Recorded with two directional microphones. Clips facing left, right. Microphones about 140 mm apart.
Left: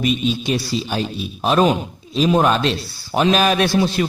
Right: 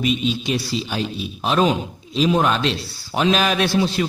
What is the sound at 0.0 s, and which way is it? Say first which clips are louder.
A man's voice: left 1 dB; 45° left (ahead or behind).